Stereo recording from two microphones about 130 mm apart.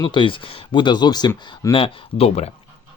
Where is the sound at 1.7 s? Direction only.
45° left (ahead or behind).